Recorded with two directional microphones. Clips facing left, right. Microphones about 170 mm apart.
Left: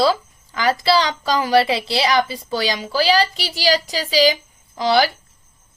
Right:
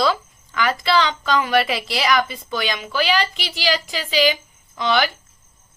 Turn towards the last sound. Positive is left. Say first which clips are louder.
# left 3 dB
turn(degrees=35)  # may be behind; listen again after turning